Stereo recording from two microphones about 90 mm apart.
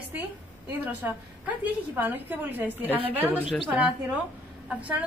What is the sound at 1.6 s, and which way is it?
A woman's voice, 20° right (ahead or behind).